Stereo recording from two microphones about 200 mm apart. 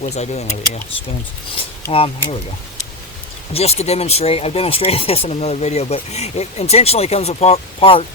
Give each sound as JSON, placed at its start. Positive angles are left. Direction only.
{"t": 0.0, "sound": "speech", "side_deg": 35}
{"t": 1.9, "sound": "speech", "side_deg": 30}
{"t": 3.5, "sound": "speech", "side_deg": 30}